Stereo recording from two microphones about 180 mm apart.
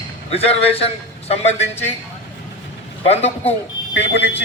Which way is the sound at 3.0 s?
35° left (ahead or behind).